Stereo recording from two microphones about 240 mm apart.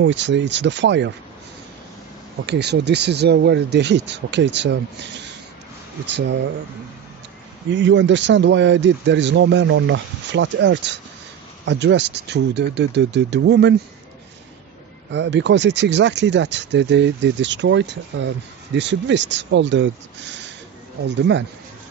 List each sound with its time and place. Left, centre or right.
0.0 s speech: right
2.4 s speech: right
7.7 s speech: right
15.0 s speech: right